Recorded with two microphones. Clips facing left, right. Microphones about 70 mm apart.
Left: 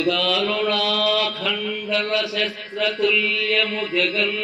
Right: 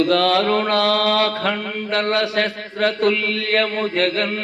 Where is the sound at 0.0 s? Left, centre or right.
Right.